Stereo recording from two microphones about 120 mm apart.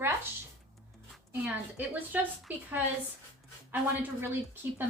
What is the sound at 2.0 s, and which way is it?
Speech, 15° right (ahead or behind).